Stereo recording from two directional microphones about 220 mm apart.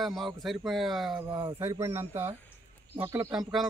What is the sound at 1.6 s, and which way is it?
Speech, 10° right (ahead or behind).